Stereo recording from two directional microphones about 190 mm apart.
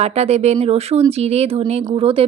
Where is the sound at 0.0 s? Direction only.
35° right (ahead or behind).